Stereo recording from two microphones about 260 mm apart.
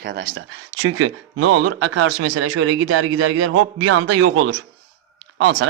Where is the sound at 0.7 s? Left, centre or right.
Right.